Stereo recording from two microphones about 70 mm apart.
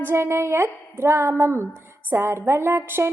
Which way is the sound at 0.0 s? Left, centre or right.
Right.